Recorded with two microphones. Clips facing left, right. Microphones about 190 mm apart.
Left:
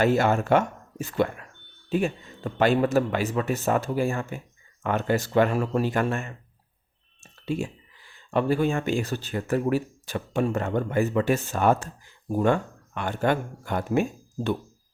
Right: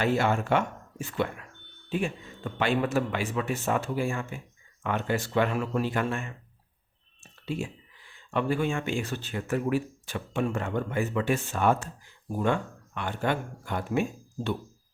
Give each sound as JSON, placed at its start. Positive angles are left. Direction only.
{"t": 0.0, "sound": "speech", "side_deg": 45}
{"t": 7.2, "sound": "clicking", "side_deg": 40}
{"t": 8.3, "sound": "speech", "side_deg": 40}